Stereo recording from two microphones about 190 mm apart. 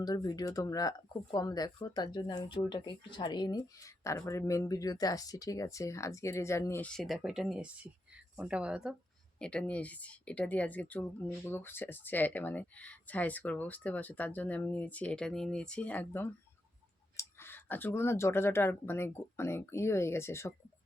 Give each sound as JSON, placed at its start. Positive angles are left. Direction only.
{"t": 0.0, "sound": "a woman's voice", "side_deg": 20}